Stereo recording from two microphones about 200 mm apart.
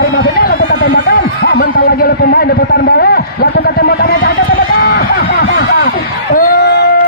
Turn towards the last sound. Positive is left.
turn(degrees=55)  # may be behind; listen again after turning